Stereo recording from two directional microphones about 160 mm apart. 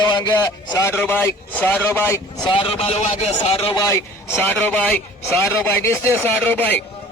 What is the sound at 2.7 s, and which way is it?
Speech, 40° left (ahead or behind).